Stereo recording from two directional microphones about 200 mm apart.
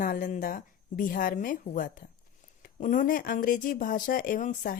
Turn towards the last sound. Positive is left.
turn(degrees=45)  # may be behind; listen again after turning